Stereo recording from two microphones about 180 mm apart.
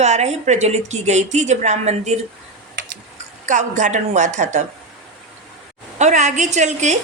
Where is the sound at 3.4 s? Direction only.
40° right (ahead or behind).